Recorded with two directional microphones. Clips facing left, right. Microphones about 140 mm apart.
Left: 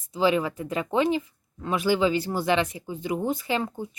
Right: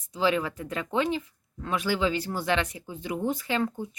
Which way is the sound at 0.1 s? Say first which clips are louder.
Left 3 dB; 5° left (ahead or behind).